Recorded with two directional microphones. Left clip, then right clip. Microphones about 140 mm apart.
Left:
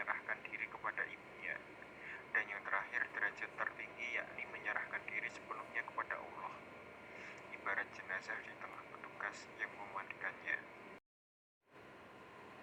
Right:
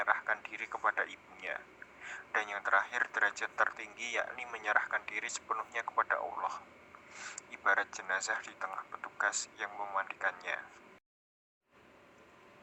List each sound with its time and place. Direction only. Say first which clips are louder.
0.0 s a man's voice: right 9 dB; 65° right (ahead or behind)